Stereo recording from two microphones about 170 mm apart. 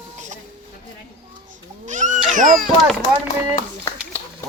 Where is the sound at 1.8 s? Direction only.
45° right (ahead or behind).